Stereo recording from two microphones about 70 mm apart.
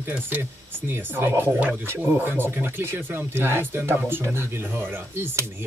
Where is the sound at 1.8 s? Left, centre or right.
Right.